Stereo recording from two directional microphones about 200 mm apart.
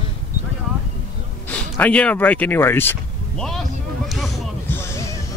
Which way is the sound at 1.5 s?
10° left (ahead or behind).